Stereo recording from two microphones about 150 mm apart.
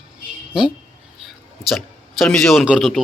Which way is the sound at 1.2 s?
Centre (ahead or behind).